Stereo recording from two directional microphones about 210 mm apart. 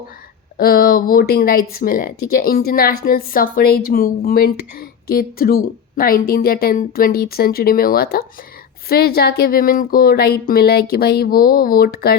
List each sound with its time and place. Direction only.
0.5 s speech: 45° left (ahead or behind)